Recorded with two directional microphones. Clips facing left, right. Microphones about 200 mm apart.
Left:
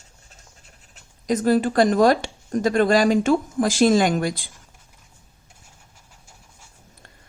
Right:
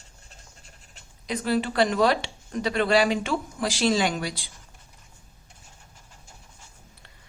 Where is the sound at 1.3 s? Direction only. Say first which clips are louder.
Left 7 dB; 45° left (ahead or behind).